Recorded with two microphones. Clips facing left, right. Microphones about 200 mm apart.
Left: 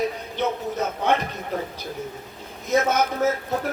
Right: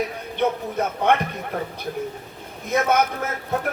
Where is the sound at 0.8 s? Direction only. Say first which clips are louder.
Right 3 dB; 55° right (ahead or behind).